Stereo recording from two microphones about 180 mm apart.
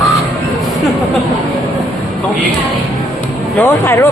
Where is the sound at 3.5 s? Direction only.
15° left (ahead or behind).